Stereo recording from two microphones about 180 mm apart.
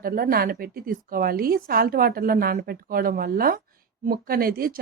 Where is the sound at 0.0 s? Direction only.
55° right (ahead or behind).